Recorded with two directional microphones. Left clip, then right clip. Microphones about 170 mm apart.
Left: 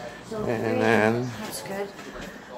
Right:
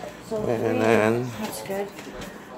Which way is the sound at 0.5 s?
Centre (ahead or behind).